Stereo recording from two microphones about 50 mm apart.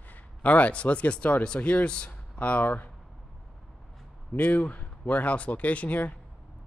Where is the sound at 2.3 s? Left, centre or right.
Left.